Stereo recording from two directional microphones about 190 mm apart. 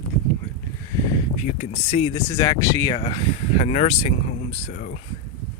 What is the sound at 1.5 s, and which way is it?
Speech, 35° left (ahead or behind).